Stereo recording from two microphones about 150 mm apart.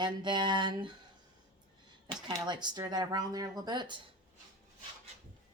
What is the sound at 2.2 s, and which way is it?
A woman's voice, 30° right (ahead or behind).